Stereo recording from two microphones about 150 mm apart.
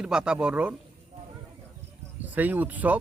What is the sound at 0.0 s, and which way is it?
Speech, 5° right (ahead or behind).